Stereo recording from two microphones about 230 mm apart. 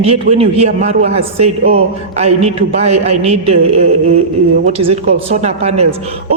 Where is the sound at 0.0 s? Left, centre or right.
Right.